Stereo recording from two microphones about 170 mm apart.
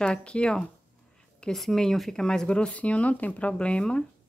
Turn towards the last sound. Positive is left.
turn(degrees=5)  # may be behind; listen again after turning